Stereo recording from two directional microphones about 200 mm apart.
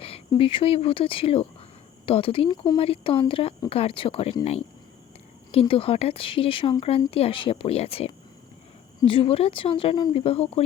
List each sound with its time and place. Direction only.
0.0 s speech: 30° left (ahead or behind)